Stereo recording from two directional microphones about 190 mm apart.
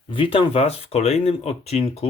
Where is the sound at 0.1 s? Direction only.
25° left (ahead or behind).